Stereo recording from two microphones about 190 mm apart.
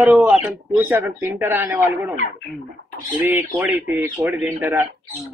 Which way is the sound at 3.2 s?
10° right (ahead or behind).